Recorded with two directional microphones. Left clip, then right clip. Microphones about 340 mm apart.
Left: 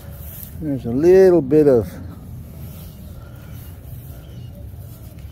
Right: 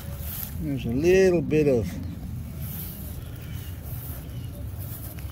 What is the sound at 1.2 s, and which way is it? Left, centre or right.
Speech, left.